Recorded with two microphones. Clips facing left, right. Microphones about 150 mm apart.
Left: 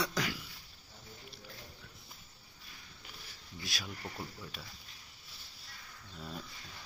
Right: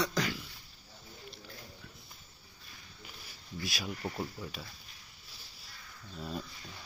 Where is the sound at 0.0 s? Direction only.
5° left (ahead or behind).